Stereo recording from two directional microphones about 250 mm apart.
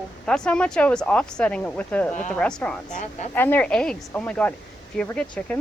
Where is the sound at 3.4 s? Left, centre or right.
Centre.